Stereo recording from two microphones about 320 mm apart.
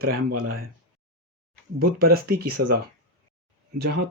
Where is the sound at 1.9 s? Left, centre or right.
Right.